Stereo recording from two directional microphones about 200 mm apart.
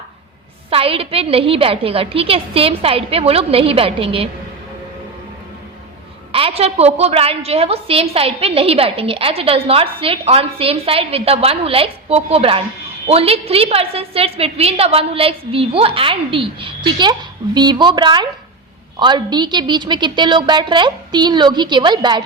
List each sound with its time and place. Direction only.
0.7 s a woman's voice: 30° right (ahead or behind)
6.3 s a woman's voice: 30° right (ahead or behind)